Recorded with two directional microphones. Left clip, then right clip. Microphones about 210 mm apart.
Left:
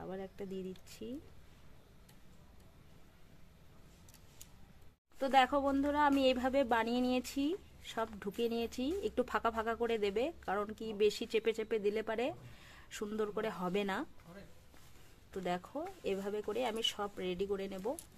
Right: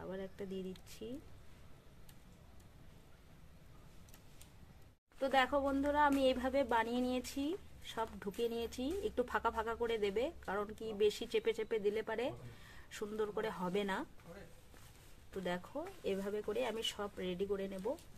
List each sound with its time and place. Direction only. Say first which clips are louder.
0.0 s speech: left 1 dB; 25° left (ahead or behind)
5.2 s a woman's voice: left 3 dB; 30° left (ahead or behind)
15.3 s a woman's voice: left 2 dB; 30° left (ahead or behind)